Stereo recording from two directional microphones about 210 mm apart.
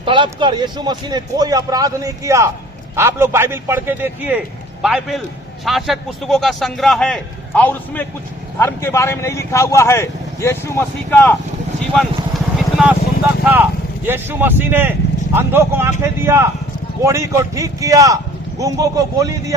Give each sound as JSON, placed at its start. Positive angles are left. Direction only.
{"t": 0.0, "sound": "a man's voice", "side_deg": -25}
{"t": 11.8, "sound": "vehicle", "side_deg": 0}
{"t": 13.4, "sound": "a man's voice", "side_deg": -10}